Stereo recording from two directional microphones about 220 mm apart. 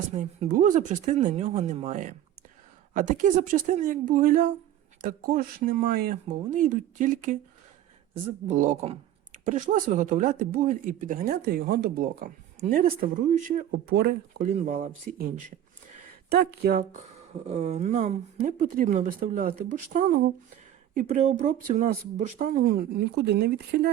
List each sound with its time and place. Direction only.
0.1 s speech: 30° right (ahead or behind)
8.4 s speech: 35° right (ahead or behind)
17.4 s speech: 30° right (ahead or behind); by 23.9 s 45° right (ahead or behind)